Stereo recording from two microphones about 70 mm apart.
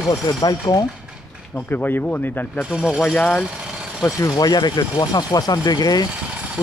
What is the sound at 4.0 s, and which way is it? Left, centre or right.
Speech, left.